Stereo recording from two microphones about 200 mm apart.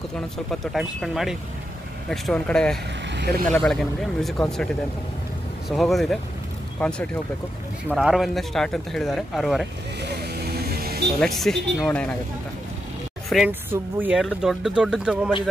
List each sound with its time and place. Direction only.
0.5 s speech: centre (ahead or behind)
3.2 s speech: 55° right (ahead or behind)
3.5 s speech: 5° left (ahead or behind)
5.7 s speech: centre (ahead or behind)
10.0 s vehicle: 55° right (ahead or behind)
11.1 s speech: centre (ahead or behind)
13.3 s speech: 5° right (ahead or behind)
14.2 s speech: centre (ahead or behind)